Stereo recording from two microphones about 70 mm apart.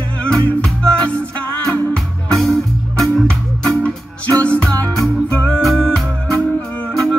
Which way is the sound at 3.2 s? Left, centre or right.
Centre.